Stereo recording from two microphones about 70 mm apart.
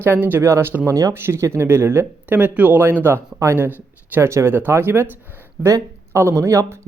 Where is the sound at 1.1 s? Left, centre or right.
Right.